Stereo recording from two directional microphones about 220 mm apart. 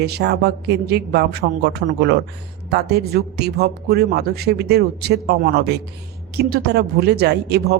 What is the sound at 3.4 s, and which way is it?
A woman's voice, 45° right (ahead or behind).